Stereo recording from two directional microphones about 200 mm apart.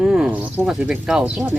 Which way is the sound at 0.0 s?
5° right (ahead or behind).